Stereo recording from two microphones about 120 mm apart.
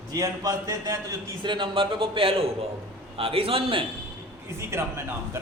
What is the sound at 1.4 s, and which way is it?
A man's voice, 45° right (ahead or behind).